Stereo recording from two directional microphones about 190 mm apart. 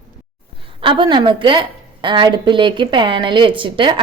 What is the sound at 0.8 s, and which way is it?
A woman's voice, 25° right (ahead or behind).